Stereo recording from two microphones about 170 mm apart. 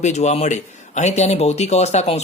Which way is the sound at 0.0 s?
40° left (ahead or behind).